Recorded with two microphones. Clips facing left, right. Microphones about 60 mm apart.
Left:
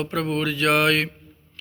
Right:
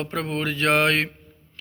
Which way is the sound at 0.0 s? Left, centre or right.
Right.